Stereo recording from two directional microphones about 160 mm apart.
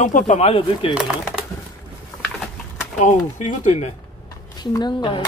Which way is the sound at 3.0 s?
50° left (ahead or behind).